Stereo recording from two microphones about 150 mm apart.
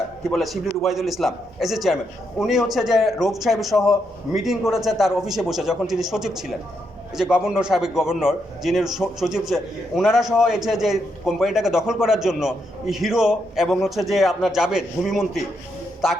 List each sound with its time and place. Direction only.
0.3 s a man's voice: centre (ahead or behind)